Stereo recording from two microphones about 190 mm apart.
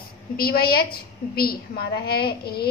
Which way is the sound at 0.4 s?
55° left (ahead or behind).